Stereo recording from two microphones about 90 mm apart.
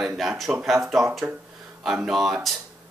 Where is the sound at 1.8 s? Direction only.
Centre (ahead or behind).